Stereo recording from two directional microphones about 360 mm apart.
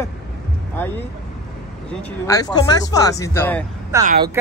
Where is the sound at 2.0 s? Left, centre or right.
Centre.